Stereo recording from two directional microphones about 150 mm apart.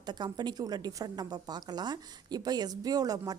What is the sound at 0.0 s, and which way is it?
A woman's voice, 30° right (ahead or behind).